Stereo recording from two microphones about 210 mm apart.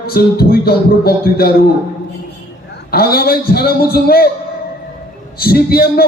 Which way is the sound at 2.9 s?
45° left (ahead or behind).